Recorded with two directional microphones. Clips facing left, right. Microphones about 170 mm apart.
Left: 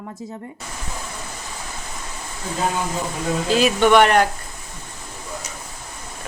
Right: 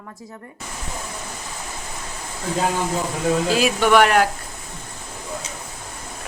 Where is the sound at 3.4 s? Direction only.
5° right (ahead or behind).